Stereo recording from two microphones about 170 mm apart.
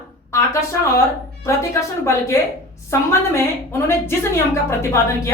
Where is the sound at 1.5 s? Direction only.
15° left (ahead or behind).